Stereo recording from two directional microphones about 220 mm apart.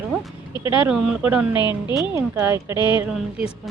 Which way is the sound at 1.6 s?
20° left (ahead or behind).